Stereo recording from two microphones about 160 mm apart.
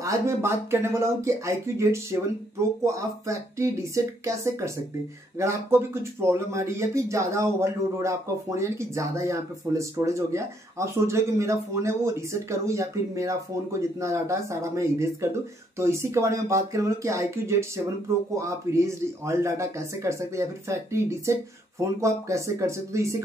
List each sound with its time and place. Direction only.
0.0 s speech: 20° right (ahead or behind)